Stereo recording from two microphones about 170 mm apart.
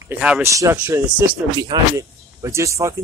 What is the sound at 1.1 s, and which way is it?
Speech, 25° right (ahead or behind).